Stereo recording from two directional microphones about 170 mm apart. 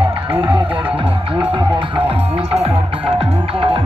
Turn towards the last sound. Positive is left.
turn(degrees=-30)  # may be behind; listen again after turning